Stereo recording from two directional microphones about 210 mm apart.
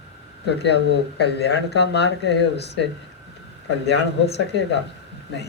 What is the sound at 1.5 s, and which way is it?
Speech, 50° left (ahead or behind).